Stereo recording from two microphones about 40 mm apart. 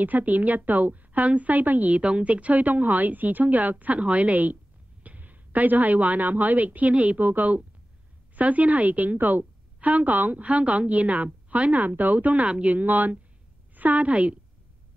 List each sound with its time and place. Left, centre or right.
0.0 s a woman's voice: right
2.0 s a woman's voice: right
7.2 s a woman's voice: right
10.4 s a woman's voice: right
12.4 s speech: right
12.7 s a woman's voice: right